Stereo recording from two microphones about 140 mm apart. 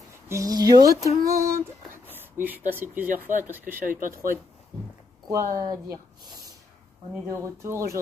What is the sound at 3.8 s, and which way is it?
Speech, 75° right (ahead or behind).